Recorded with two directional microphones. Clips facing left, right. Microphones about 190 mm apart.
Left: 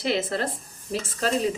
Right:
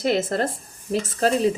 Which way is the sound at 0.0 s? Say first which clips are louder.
Right 4 dB; 45° right (ahead or behind).